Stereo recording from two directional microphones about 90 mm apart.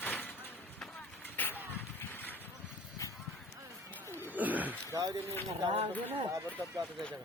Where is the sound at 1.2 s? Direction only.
20° left (ahead or behind).